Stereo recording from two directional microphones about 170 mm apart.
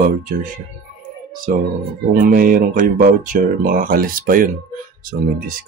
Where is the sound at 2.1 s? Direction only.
55° right (ahead or behind).